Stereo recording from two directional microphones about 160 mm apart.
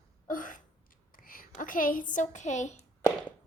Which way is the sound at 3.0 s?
10° left (ahead or behind).